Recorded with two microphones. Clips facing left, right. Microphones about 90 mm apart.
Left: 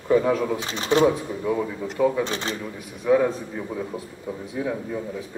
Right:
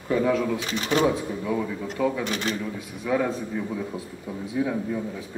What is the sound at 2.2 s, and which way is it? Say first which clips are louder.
Speech: right 1 dB; 30° left (ahead or behind).